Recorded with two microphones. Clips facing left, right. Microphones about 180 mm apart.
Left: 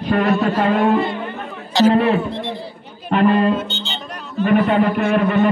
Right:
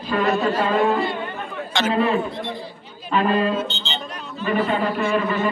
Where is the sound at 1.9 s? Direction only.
65° left (ahead or behind).